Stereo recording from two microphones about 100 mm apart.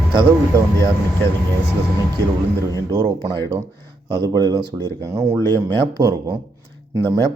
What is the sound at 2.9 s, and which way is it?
Speech, 40° right (ahead or behind).